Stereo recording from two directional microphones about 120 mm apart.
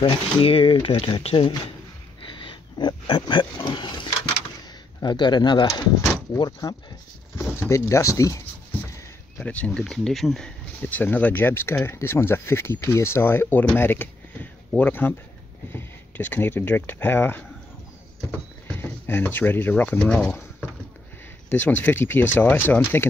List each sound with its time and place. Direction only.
0.0 s speech: 50° left (ahead or behind)
2.2 s pig: 45° left (ahead or behind)
5.0 s speech: 35° left (ahead or behind)
9.4 s speech: 10° left (ahead or behind)
10.8 s speech: 15° left (ahead or behind)
18.7 s speech: 15° left (ahead or behind)
20.2 s a sound: 20° left (ahead or behind)
21.5 s speech: 15° left (ahead or behind)